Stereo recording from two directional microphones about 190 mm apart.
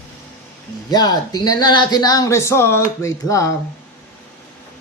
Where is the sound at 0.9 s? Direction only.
20° left (ahead or behind).